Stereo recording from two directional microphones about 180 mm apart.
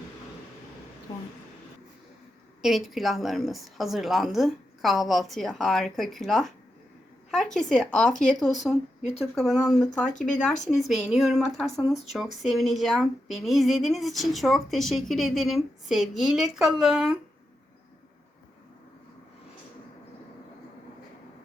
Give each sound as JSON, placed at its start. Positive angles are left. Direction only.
{"t": 2.6, "sound": "speech", "side_deg": 0}
{"t": 7.7, "sound": "speech", "side_deg": 5}
{"t": 10.3, "sound": "speech", "side_deg": 40}
{"t": 10.8, "sound": "speech", "side_deg": 0}